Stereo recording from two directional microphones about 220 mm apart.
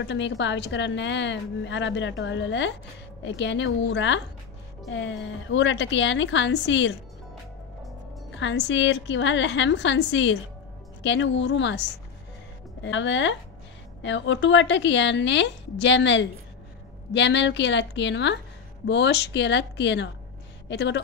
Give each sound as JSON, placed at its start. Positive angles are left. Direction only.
{"t": 0.0, "sound": "a woman's voice", "side_deg": 55}
{"t": 8.4, "sound": "a woman's voice", "side_deg": 55}